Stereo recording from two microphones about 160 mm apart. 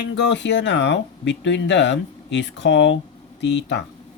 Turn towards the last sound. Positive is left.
turn(degrees=90)